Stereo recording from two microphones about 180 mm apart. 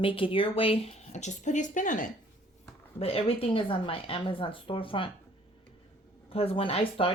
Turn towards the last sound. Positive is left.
turn(degrees=30)  # may be behind; listen again after turning